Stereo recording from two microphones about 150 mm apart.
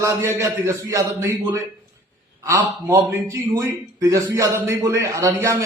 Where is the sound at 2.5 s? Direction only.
20° right (ahead or behind).